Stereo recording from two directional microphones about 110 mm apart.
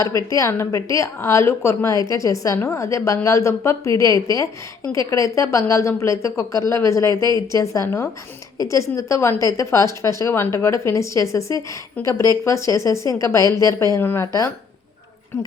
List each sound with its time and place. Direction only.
0.3 s a woman's voice: 30° left (ahead or behind)